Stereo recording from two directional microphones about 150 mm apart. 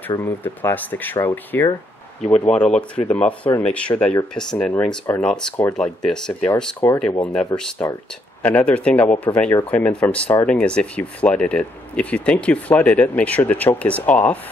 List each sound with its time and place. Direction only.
0.2 s speech: 15° left (ahead or behind)